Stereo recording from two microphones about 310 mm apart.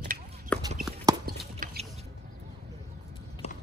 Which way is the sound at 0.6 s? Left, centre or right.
Right.